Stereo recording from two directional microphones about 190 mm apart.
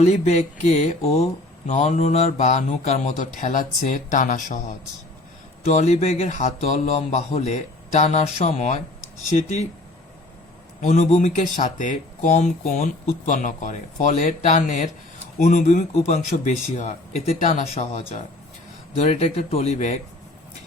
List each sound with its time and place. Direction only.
0.0 s speech: 35° left (ahead or behind)
10.8 s speech: 40° left (ahead or behind)